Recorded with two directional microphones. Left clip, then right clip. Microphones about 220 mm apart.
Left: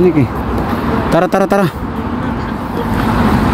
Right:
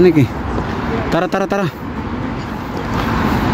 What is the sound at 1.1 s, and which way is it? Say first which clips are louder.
Speech: left 6 dB; centre (ahead or behind).